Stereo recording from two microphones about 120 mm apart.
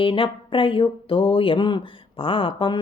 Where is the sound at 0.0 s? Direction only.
45° left (ahead or behind).